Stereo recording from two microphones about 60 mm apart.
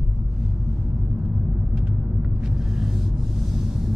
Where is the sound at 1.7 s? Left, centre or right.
Centre.